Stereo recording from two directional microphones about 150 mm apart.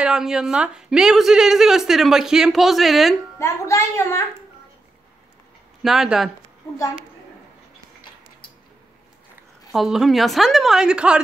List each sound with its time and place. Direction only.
0.0 s a woman's voice: 5° right (ahead or behind)
3.3 s a woman's voice: 20° left (ahead or behind)
5.8 s a woman's voice: centre (ahead or behind)
9.7 s a woman's voice: centre (ahead or behind)